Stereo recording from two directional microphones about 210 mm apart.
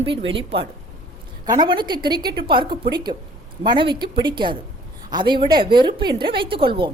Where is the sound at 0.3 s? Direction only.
25° right (ahead or behind).